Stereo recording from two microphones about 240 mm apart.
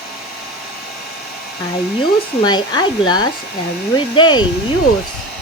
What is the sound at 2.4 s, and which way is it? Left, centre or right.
Speech, centre.